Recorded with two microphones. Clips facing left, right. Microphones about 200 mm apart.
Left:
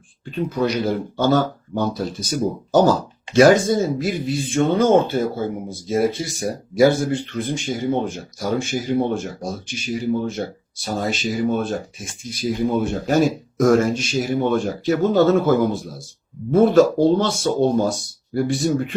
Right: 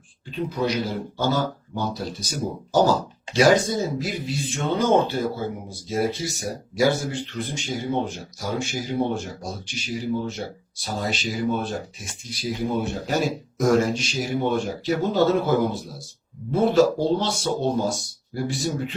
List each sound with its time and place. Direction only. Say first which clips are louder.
0.3 s speech: left 4 dB; 50° left (ahead or behind)
3.3 s speech: left 5 dB; 50° left (ahead or behind)